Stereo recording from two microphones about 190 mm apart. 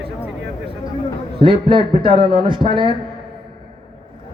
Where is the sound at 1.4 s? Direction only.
25° right (ahead or behind).